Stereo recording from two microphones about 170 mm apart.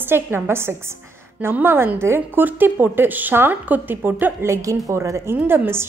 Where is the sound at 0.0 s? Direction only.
15° right (ahead or behind).